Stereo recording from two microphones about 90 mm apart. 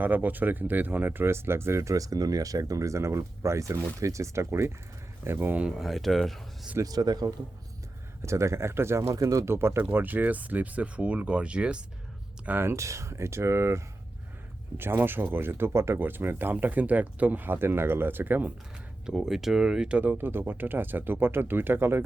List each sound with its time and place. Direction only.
0.0 s speech: 20° right (ahead or behind)
5.6 s speech: centre (ahead or behind)
6.8 s speech: 45° right (ahead or behind)
8.2 s speech: 30° right (ahead or behind); by 11.8 s 10° right (ahead or behind)
12.5 s speech: 25° right (ahead or behind)
19.0 s speech: 5° right (ahead or behind); by 22.0 s 25° right (ahead or behind)